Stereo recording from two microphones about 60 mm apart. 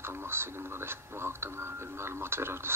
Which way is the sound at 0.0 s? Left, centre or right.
Right.